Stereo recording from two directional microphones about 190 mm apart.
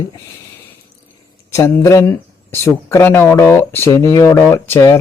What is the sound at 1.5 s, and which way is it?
Speech, 15° left (ahead or behind).